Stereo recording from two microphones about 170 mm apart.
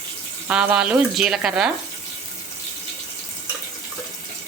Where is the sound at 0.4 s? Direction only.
10° right (ahead or behind).